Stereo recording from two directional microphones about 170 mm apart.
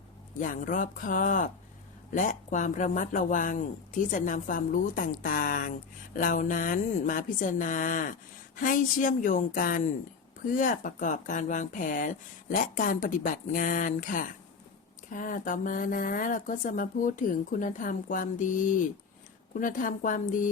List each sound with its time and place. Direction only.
0.3 s speech: 50° left (ahead or behind)